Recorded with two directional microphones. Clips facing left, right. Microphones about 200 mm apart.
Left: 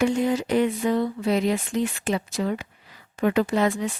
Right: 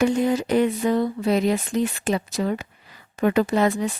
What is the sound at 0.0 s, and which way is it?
Speech, 40° right (ahead or behind).